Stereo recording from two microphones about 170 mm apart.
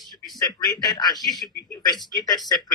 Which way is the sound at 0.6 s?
20° left (ahead or behind).